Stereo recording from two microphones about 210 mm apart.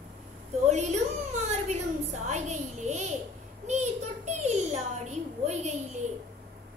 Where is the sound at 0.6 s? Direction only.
35° right (ahead or behind).